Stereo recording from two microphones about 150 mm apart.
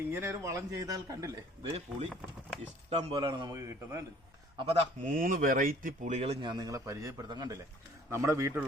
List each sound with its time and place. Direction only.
0.1 s speech: 15° right (ahead or behind)
1.6 s speech: 45° right (ahead or behind)
3.5 s speech: 20° right (ahead or behind)
4.5 s speech: 40° right (ahead or behind)
6.5 s speech: 25° right (ahead or behind)